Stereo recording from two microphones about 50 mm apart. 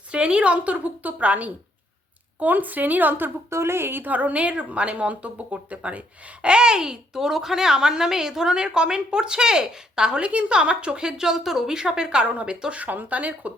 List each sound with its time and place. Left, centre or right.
0.1 s a woman's voice: right
3.5 s a woman's voice: right; by 12.2 s centre
12.2 s a woman's voice: right